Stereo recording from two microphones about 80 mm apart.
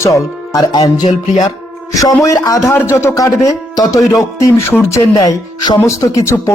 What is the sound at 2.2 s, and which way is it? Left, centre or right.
Speech, left.